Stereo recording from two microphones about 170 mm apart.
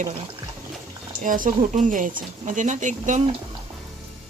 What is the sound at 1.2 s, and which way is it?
Speech, 55° right (ahead or behind).